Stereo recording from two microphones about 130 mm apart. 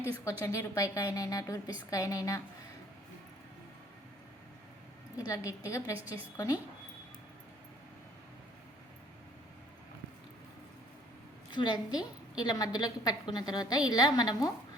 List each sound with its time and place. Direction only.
0.0 s a woman's voice: 20° left (ahead or behind)
5.1 s a woman's voice: 25° left (ahead or behind)
11.5 s a woman's voice: 35° left (ahead or behind)